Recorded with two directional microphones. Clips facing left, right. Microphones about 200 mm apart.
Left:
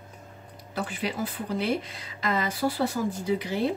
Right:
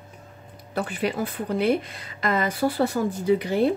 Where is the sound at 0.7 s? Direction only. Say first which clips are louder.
Right 5 dB; 55° right (ahead or behind).